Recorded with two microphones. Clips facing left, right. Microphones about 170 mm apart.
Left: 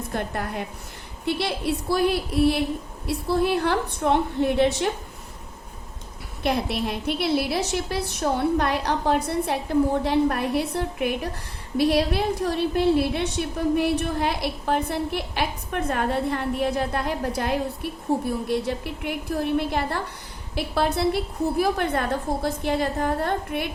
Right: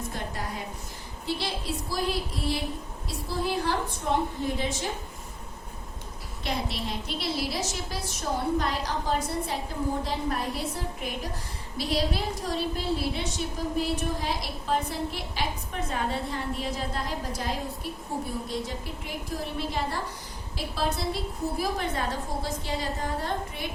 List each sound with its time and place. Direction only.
0.1 s a woman's voice: 60° left (ahead or behind)
6.4 s a woman's voice: 60° left (ahead or behind)